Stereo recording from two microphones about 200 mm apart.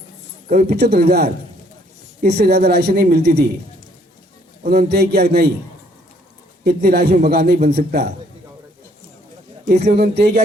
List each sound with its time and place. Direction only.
0.4 s a woman's voice: 50° right (ahead or behind)
4.6 s a woman's voice: 50° right (ahead or behind)
6.7 s a woman's voice: 50° right (ahead or behind)
9.8 s a woman's voice: 50° right (ahead or behind)